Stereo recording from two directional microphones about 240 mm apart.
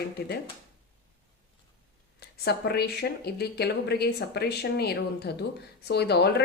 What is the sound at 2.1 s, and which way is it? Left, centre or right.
Speech, left.